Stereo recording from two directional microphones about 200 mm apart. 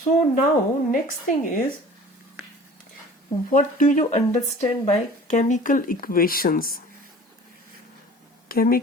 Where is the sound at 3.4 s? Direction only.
40° left (ahead or behind).